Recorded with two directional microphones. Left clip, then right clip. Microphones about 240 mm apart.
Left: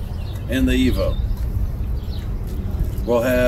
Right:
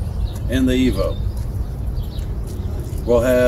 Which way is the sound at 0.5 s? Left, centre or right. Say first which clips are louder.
Right 1 dB; centre.